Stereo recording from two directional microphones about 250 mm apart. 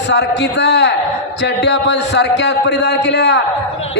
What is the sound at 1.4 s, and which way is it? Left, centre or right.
A man's voice, left.